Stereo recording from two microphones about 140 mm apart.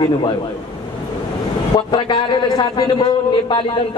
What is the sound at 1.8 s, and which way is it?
A man's voice, 30° left (ahead or behind).